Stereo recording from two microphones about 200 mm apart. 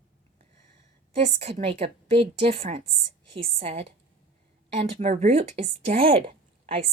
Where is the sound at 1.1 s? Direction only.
30° right (ahead or behind).